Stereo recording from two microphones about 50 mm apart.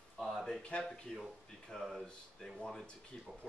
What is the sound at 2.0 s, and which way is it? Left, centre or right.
Speech, centre.